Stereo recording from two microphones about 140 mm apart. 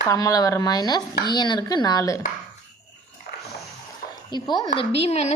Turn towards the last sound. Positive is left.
turn(degrees=50)  # may be behind; listen again after turning